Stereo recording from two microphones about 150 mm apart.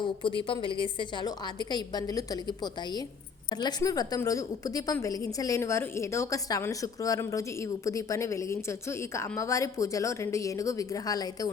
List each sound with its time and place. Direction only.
0.0 s a woman's voice: 30° left (ahead or behind)